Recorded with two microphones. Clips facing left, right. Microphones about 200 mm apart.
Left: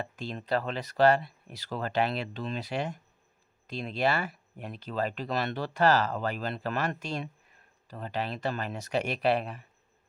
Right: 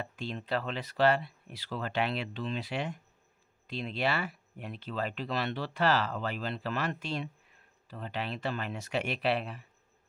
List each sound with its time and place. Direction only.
0.0 s speech: 40° left (ahead or behind)